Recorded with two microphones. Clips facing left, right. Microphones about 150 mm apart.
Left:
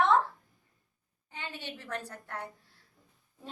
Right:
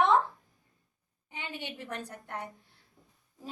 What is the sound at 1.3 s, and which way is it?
A woman's voice, 15° right (ahead or behind).